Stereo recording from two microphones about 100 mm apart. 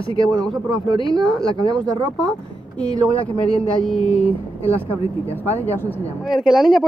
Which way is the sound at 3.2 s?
60° left (ahead or behind).